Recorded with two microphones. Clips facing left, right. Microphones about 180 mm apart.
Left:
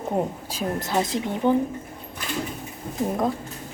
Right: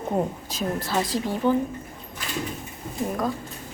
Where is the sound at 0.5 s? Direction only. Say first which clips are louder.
Left 2 dB; 15° left (ahead or behind).